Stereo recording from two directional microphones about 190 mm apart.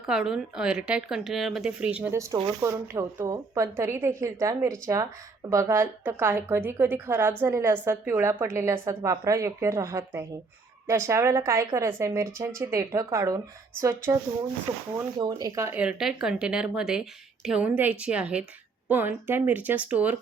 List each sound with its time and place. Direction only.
0.0 s a woman's voice: centre (ahead or behind)
15.2 s speech: 20° right (ahead or behind)
15.8 s a woman's voice: 5° right (ahead or behind)